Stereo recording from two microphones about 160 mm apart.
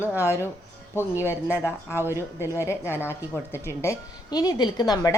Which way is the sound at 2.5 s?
15° left (ahead or behind).